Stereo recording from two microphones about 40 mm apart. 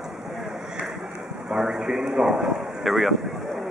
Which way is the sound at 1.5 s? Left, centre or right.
Centre.